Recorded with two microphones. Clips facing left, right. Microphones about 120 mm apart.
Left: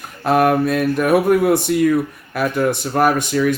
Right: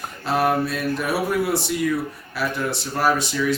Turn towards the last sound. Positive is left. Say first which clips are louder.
# left 4 dB
turn(degrees=55)  # may be behind; listen again after turning